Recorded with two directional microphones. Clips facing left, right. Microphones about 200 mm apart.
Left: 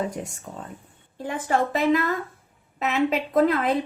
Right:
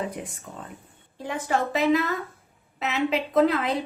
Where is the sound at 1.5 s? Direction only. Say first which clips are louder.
Left 1 dB; 50° left (ahead or behind).